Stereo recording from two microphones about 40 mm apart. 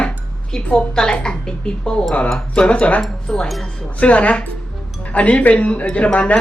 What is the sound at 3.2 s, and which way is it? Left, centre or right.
Speech, centre.